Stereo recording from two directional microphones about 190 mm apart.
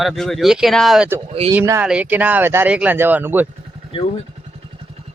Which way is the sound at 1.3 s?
35° right (ahead or behind).